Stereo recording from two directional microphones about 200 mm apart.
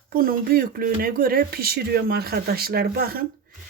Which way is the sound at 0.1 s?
45° right (ahead or behind).